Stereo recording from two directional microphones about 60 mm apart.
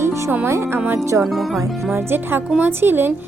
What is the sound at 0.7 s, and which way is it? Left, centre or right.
Music, right.